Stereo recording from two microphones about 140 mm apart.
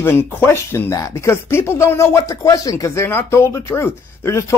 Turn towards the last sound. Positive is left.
turn(degrees=20)  # may be behind; listen again after turning